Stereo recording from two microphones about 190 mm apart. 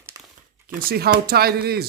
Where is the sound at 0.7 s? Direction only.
45° right (ahead or behind).